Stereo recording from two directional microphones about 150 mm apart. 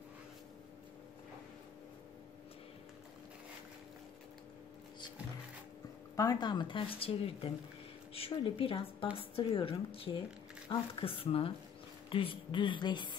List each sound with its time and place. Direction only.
6.1 s speech: 25° left (ahead or behind)